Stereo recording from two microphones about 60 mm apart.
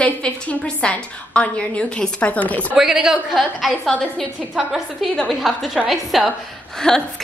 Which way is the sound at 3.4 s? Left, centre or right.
Centre.